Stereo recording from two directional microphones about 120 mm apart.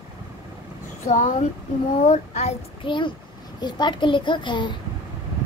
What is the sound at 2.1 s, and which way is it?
Speech, 65° left (ahead or behind).